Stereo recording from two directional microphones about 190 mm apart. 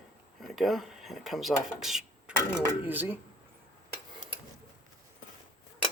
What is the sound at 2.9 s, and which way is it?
Speech, 10° right (ahead or behind).